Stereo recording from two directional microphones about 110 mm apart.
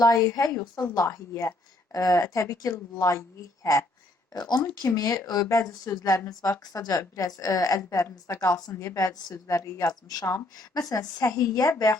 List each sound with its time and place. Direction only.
0.0 s a woman's voice: 35° left (ahead or behind)
4.3 s a woman's voice: 40° left (ahead or behind)